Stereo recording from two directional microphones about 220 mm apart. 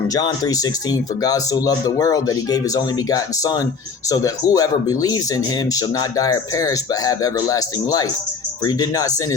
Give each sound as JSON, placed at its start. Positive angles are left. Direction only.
{"t": 0.1, "sound": "speech", "side_deg": 15}